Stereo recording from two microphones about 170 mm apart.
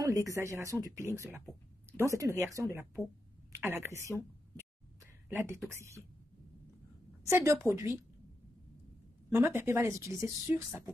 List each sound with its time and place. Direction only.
0.0 s speech: 20° right (ahead or behind)
5.3 s speech: 15° right (ahead or behind)
7.2 s speech: 15° right (ahead or behind)
9.3 s speech: 15° right (ahead or behind)